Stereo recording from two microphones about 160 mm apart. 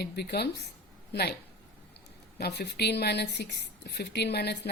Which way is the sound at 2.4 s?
90° left.